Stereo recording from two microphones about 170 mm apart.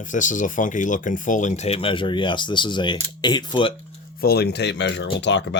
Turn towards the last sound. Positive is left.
turn(degrees=90)